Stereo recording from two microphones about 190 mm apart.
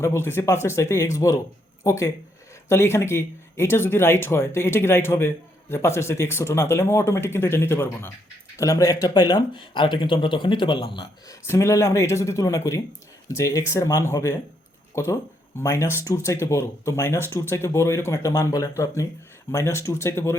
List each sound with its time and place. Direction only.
0.0 s speech: 15° left (ahead or behind)